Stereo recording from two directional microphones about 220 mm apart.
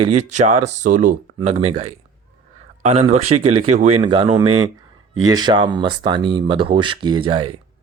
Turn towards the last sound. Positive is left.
turn(degrees=-20)  # may be behind; listen again after turning